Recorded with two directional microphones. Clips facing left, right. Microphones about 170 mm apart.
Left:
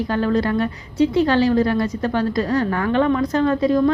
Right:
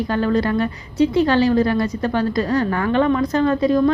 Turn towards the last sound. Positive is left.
turn(degrees=-15)  # may be behind; listen again after turning